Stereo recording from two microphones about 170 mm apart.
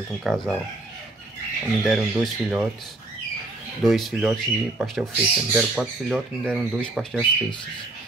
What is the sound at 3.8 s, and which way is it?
Speech, centre (ahead or behind).